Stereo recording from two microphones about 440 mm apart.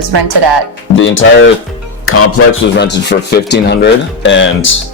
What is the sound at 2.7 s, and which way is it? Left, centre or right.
Speech, left.